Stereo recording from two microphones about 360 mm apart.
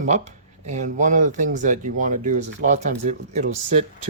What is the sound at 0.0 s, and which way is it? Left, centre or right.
Speech, centre.